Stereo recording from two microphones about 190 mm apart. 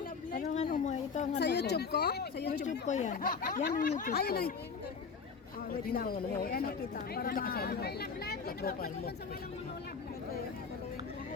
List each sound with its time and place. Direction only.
0.3 s a sound: 35° left (ahead or behind)
1.4 s speech: 60° left (ahead or behind)
2.6 s speech: 40° left (ahead or behind)
5.7 s speech: 50° left (ahead or behind)